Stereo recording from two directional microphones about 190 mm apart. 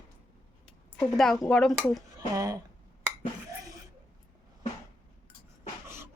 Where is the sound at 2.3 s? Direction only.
20° right (ahead or behind).